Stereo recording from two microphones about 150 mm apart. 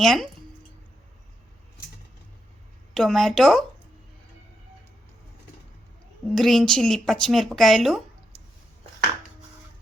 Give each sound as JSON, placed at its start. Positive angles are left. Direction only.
{"t": 0.0, "sound": "speech", "side_deg": 0}
{"t": 2.9, "sound": "speech", "side_deg": 5}
{"t": 6.3, "sound": "speech", "side_deg": 5}